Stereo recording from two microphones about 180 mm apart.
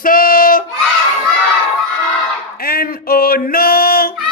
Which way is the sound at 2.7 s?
55° left (ahead or behind).